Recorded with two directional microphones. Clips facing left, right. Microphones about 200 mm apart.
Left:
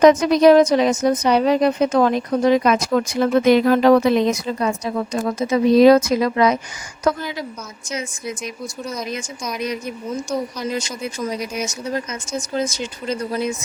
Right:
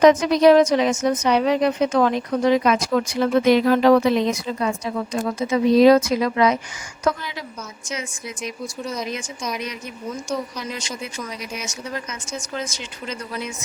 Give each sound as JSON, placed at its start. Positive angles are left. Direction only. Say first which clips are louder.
{"t": 0.0, "sound": "a woman's voice", "louder": "left 2 dB", "side_deg": 45}
{"t": 7.9, "sound": "speech", "louder": "left 4 dB", "side_deg": 40}
{"t": 8.8, "sound": "speech", "louder": "even", "side_deg": 0}
{"t": 9.6, "sound": "speech", "louder": "left 6 dB", "side_deg": 40}